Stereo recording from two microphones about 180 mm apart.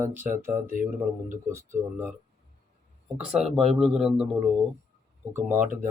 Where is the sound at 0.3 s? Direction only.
45° right (ahead or behind).